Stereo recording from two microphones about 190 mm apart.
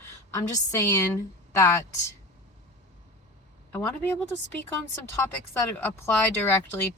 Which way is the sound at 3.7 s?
10° left (ahead or behind).